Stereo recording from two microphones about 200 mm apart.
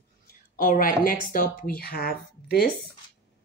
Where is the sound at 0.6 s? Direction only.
45° left (ahead or behind).